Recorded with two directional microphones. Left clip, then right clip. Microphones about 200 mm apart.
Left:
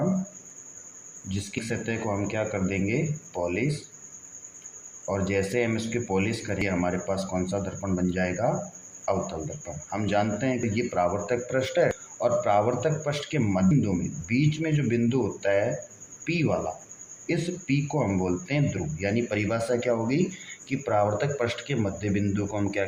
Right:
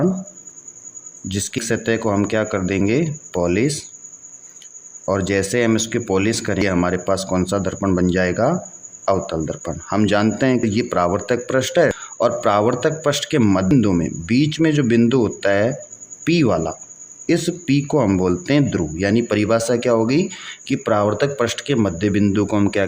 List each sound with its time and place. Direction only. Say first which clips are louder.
1.3 s speech: right 10 dB; 50° right (ahead or behind)
5.0 s speech: right 8 dB; 50° right (ahead or behind)